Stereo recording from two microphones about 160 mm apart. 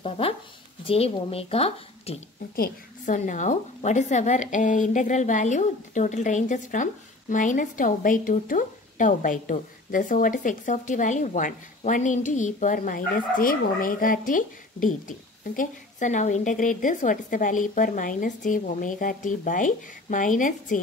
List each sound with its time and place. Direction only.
0.0 s speech: 35° left (ahead or behind)
2.5 s a woman's voice: 65° left (ahead or behind)
3.2 s a woman's voice: 50° left (ahead or behind)